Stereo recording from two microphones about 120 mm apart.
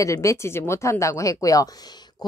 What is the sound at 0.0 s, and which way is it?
A woman's voice, 25° left (ahead or behind).